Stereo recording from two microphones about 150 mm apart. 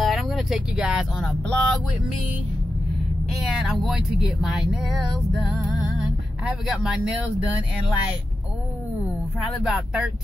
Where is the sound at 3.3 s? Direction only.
Centre (ahead or behind).